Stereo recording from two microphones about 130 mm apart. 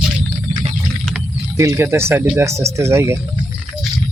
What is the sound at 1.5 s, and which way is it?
Speech, 20° right (ahead or behind).